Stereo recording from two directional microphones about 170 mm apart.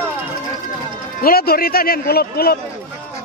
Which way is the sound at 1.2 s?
65° left (ahead or behind).